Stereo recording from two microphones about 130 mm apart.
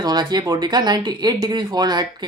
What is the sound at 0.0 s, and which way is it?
Speech, 30° right (ahead or behind).